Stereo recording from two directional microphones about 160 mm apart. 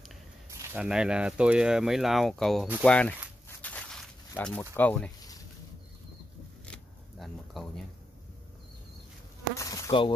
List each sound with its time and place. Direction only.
0.7 s speech: 5° right (ahead or behind)
3.4 s a sound: 10° left (ahead or behind)
4.4 s speech: 5° left (ahead or behind)
6.6 s shuffling cards: 5° left (ahead or behind)
9.6 s insect: 20° left (ahead or behind)